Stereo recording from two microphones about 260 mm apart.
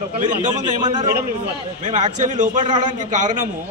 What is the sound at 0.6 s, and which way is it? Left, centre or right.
Speech, centre.